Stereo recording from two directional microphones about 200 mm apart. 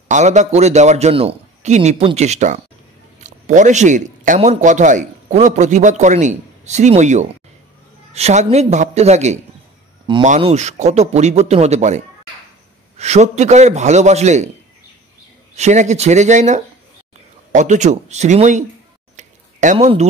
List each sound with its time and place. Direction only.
0.1 s a man's voice: 35° right (ahead or behind)
15.5 s a man's voice: 35° right (ahead or behind)
19.1 s a sound: 35° right (ahead or behind)